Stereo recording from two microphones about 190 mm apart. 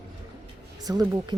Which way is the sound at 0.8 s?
20° right (ahead or behind).